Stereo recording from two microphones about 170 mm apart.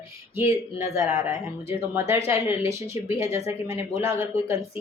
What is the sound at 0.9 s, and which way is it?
Speech, 15° right (ahead or behind).